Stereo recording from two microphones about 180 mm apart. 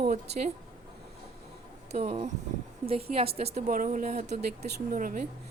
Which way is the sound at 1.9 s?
35° right (ahead or behind).